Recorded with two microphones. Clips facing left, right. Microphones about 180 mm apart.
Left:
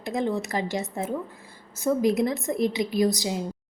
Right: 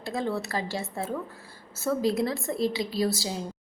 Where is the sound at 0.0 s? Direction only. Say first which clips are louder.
Left 3 dB; 20° left (ahead or behind).